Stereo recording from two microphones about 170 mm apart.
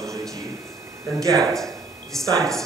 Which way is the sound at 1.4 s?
Centre (ahead or behind).